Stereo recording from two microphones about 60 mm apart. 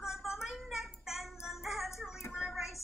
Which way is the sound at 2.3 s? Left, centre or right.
Centre.